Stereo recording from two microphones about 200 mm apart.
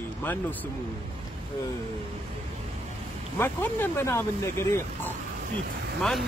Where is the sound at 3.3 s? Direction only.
10° left (ahead or behind).